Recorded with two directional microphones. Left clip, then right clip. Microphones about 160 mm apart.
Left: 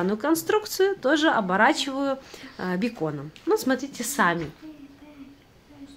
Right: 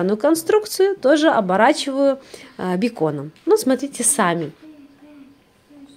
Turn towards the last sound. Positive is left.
turn(degrees=-35)  # may be behind; listen again after turning